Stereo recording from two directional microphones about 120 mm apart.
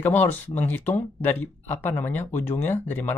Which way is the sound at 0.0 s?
15° left (ahead or behind).